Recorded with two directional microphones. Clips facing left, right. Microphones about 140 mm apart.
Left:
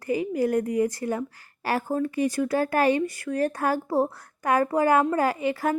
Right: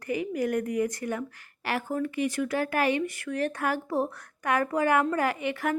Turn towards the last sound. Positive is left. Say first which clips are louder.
# left 4 dB
turn(degrees=35)  # may be behind; listen again after turning